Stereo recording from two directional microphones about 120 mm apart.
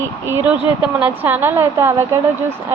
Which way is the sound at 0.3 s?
15° right (ahead or behind).